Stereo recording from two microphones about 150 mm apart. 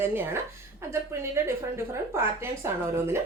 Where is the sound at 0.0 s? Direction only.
15° right (ahead or behind).